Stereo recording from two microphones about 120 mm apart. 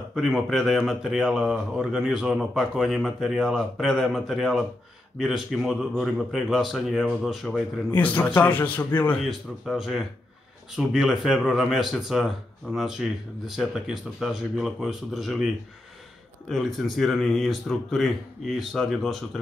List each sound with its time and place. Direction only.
0.1 s speech: 5° right (ahead or behind)
7.9 s a man's voice: 15° left (ahead or behind)
9.2 s speech: centre (ahead or behind)